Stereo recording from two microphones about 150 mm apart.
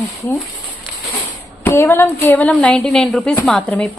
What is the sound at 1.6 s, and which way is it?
Speech, 15° left (ahead or behind).